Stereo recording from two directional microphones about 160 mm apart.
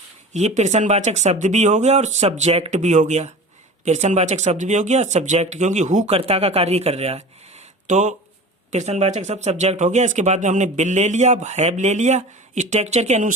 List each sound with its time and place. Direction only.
0.3 s speech: 45° right (ahead or behind)